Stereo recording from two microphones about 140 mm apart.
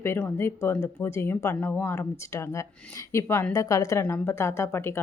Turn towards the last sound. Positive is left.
turn(degrees=20)  # may be behind; listen again after turning